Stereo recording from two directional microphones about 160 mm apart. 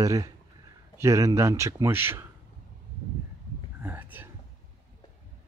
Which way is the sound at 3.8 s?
10° right (ahead or behind).